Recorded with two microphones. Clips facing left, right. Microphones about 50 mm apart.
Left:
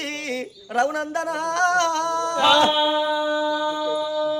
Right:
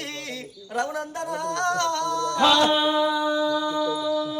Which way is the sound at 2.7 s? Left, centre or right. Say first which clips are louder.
Left 1 dB; centre.